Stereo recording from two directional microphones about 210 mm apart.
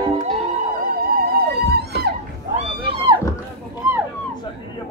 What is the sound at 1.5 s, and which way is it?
Music, 50° right (ahead or behind).